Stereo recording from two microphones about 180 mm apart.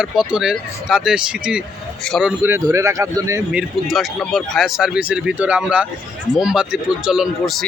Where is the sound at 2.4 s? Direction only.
15° right (ahead or behind).